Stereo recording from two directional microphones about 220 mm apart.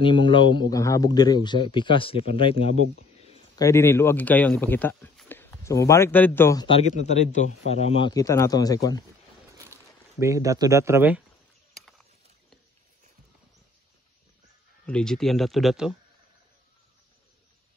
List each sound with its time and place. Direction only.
0.0 s speech: 20° left (ahead or behind)
3.5 s speech: 15° left (ahead or behind)
6.8 s speech: 30° left (ahead or behind); by 9.0 s 15° left (ahead or behind)
10.2 s speech: 15° right (ahead or behind)
14.9 s speech: 5° left (ahead or behind)